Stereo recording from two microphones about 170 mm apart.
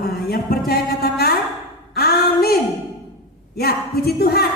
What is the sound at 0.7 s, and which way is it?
Music, 65° left (ahead or behind).